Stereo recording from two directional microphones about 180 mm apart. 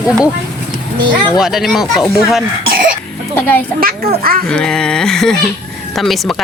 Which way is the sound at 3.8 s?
55° right (ahead or behind).